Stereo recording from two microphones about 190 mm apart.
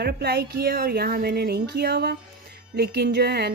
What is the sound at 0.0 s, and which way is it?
Speech, 60° right (ahead or behind).